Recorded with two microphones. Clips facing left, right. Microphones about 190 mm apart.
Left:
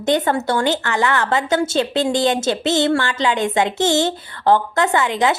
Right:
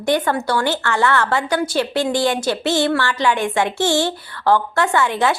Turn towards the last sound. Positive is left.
turn(degrees=20)  # may be behind; listen again after turning